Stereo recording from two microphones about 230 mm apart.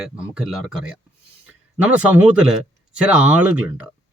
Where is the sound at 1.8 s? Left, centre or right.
Centre.